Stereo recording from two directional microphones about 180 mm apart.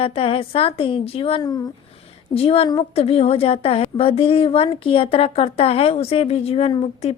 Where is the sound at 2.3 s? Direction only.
35° left (ahead or behind).